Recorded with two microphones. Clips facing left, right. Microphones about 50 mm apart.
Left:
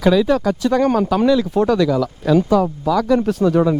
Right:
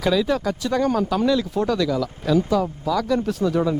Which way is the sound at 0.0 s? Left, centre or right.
Centre.